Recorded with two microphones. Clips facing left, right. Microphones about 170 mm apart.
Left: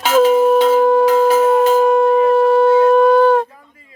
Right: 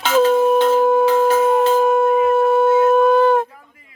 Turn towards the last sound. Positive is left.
turn(degrees=-5)  # may be behind; listen again after turning